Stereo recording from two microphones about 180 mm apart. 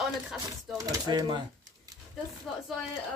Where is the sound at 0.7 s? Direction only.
20° right (ahead or behind).